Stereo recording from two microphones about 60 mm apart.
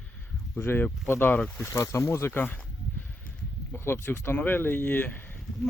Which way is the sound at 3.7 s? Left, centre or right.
Left.